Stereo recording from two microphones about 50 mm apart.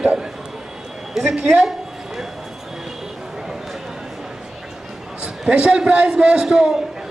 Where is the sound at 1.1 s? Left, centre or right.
Centre.